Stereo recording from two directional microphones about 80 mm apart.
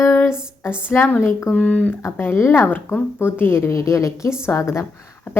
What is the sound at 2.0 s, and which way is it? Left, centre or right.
A woman's voice, left.